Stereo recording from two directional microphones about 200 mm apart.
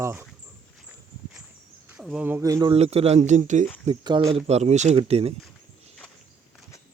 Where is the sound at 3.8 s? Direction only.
25° right (ahead or behind).